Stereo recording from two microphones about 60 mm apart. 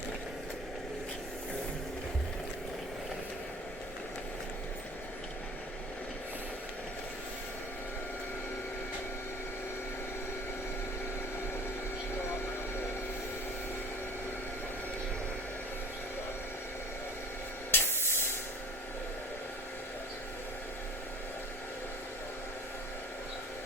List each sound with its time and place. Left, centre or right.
17.7 s spray: left